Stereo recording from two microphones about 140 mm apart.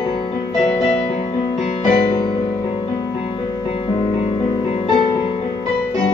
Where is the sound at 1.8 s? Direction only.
45° left (ahead or behind).